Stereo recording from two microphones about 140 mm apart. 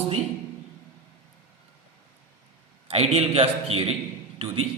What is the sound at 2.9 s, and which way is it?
A man's voice, 45° right (ahead or behind).